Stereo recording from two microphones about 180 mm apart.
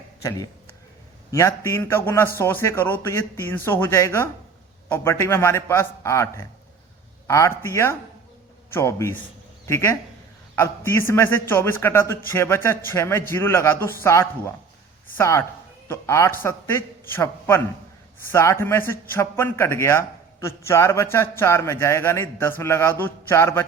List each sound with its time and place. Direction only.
0.2 s a man's voice: 15° left (ahead or behind)